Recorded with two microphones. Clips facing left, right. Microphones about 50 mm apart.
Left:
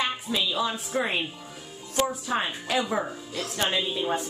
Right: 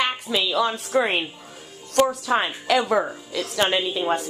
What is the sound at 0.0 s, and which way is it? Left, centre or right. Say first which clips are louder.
A woman's voice: right 4 dB; right.